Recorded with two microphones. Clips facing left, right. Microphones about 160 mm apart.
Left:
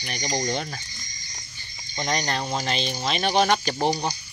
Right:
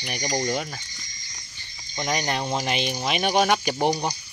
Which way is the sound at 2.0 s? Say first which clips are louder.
Right 1 dB; 10° right (ahead or behind).